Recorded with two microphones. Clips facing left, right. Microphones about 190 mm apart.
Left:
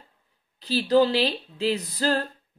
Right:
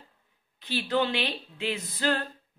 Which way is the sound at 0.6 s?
35° left (ahead or behind).